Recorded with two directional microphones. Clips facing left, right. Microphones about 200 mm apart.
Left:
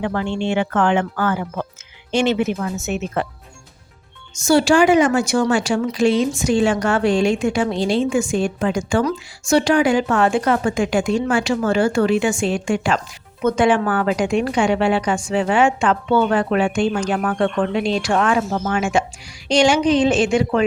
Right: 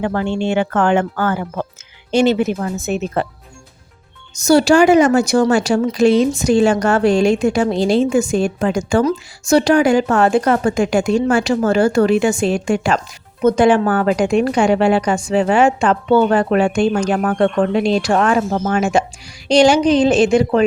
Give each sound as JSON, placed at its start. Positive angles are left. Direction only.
{"t": 0.0, "sound": "a woman's voice", "side_deg": -40}
{"t": 4.4, "sound": "a woman's voice", "side_deg": -40}